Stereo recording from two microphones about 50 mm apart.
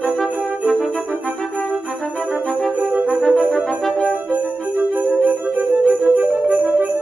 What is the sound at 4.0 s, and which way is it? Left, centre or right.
Jingle bell, right.